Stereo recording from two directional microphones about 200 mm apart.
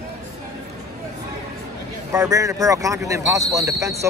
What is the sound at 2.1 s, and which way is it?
Speech, 15° right (ahead or behind).